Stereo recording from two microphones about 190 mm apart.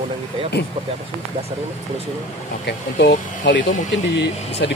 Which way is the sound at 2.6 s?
60° left (ahead or behind).